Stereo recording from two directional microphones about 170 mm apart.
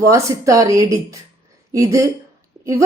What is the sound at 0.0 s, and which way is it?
A woman's voice, 20° right (ahead or behind).